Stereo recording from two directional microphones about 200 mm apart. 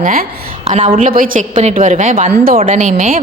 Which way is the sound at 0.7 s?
30° right (ahead or behind).